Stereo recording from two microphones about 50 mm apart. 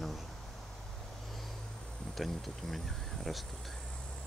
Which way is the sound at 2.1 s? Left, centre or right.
Centre.